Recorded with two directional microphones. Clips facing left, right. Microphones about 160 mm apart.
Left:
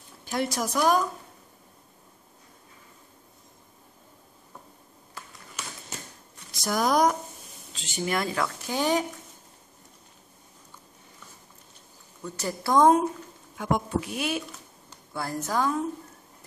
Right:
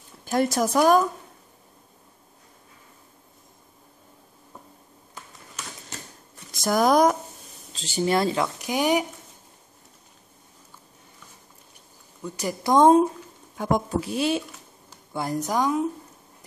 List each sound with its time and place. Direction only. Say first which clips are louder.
0.2 s a woman's voice: right 6 dB; 45° right (ahead or behind)
6.5 s speech: right 5 dB; 50° right (ahead or behind)
7.7 s speech: right 6 dB; 35° right (ahead or behind); by 9.0 s 15° right (ahead or behind)
12.2 s speech: right 3 dB; 15° right (ahead or behind)
13.6 s a woman's voice: right 3 dB; 35° right (ahead or behind)
15.1 s a woman's voice: right 3 dB; 15° right (ahead or behind)